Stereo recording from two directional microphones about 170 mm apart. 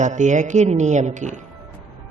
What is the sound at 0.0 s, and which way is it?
A man's voice, 45° right (ahead or behind).